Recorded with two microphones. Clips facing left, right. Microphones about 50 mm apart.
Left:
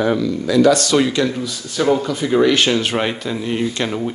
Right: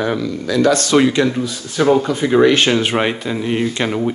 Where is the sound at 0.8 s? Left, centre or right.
Right.